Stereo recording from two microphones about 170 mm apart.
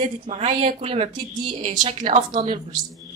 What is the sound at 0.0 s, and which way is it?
A woman's voice, 40° right (ahead or behind).